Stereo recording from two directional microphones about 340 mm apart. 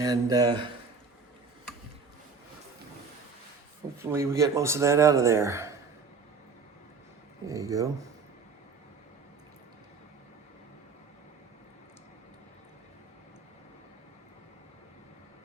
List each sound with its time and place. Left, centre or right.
0.0 s speech: centre
4.0 s speech: centre
7.4 s speech: centre